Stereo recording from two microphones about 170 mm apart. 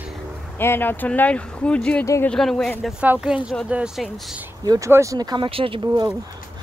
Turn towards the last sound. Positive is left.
turn(degrees=-25)  # may be behind; listen again after turning